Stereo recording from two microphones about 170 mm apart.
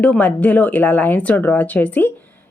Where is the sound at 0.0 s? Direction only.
10° left (ahead or behind).